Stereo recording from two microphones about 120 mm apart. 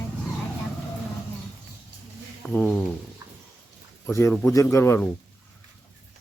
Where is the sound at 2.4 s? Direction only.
5° left (ahead or behind).